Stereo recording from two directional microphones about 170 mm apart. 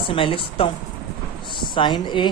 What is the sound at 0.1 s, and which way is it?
A woman's voice, 30° left (ahead or behind).